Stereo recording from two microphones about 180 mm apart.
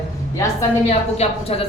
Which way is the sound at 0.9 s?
35° left (ahead or behind).